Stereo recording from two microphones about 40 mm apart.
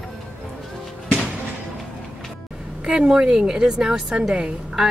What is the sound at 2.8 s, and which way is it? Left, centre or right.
Speech, right.